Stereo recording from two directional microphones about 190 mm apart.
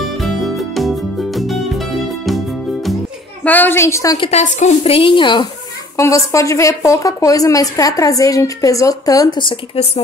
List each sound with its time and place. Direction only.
0.2 s music: centre (ahead or behind)
3.4 s speech: 10° left (ahead or behind)
4.3 s a woman's voice: 35° left (ahead or behind)